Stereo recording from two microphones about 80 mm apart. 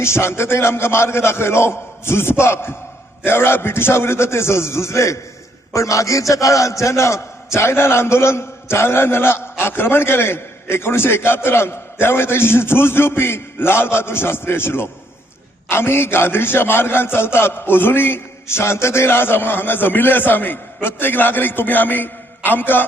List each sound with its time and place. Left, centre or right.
0.0 s a man's voice: left